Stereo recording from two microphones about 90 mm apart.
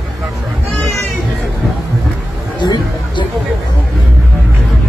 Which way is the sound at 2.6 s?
55° left (ahead or behind).